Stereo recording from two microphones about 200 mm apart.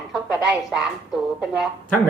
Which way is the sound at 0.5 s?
5° right (ahead or behind).